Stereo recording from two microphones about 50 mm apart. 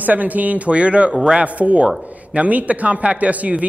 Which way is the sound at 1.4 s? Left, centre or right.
Right.